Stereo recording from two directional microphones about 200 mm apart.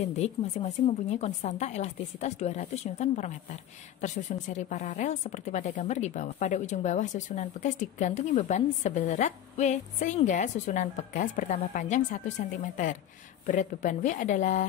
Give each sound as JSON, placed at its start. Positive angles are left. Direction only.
{"t": 0.2, "sound": "speech", "side_deg": 30}